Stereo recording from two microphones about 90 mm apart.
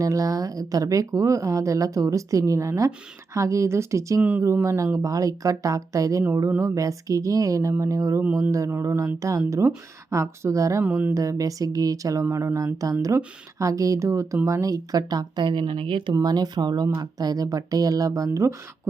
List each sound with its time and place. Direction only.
0.0 s speech: 40° right (ahead or behind)
4.2 s speech: 15° right (ahead or behind)
4.6 s speech: 35° right (ahead or behind)
10.8 s speech: 20° right (ahead or behind)
11.1 s speech: 35° right (ahead or behind); by 16.1 s 70° right (ahead or behind)
16.2 s speech: 50° right (ahead or behind)